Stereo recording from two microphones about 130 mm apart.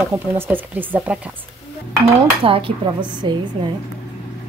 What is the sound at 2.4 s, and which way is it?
Speech, 45° right (ahead or behind).